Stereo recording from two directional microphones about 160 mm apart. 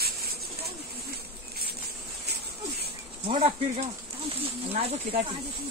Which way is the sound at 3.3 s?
35° right (ahead or behind).